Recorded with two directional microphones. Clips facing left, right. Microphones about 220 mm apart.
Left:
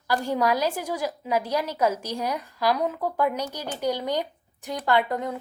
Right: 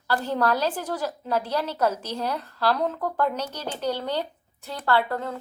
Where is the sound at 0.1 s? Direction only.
10° left (ahead or behind).